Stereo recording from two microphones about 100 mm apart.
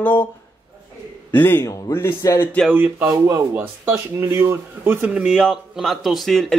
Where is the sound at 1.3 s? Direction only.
20° left (ahead or behind).